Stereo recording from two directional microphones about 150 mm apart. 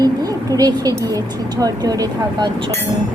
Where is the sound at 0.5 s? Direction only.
25° right (ahead or behind).